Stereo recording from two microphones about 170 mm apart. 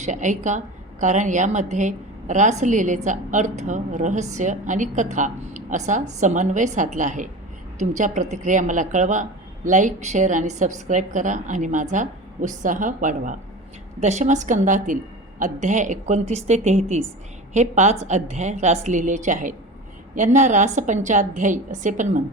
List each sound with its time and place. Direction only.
0.0 s a woman's voice: 45° right (ahead or behind)